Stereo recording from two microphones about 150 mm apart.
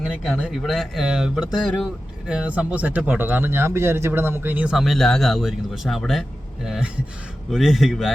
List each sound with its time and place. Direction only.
0.0 s speech: 5° right (ahead or behind)